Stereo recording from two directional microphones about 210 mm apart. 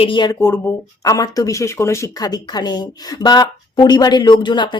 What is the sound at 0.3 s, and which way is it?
A woman's voice, 10° left (ahead or behind).